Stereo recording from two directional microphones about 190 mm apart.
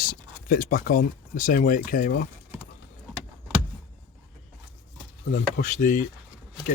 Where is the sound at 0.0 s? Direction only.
50° left (ahead or behind).